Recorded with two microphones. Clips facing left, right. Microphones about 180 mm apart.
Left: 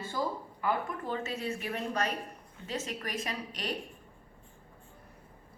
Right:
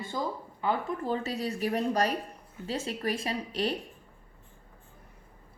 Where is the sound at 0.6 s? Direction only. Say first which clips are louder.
Right 3 dB; 35° right (ahead or behind).